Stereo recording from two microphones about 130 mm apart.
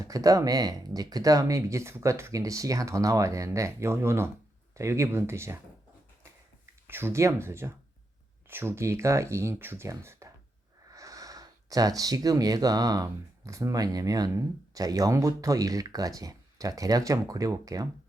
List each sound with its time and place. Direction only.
0.0 s speech: 25° right (ahead or behind)
6.8 s speech: 15° right (ahead or behind)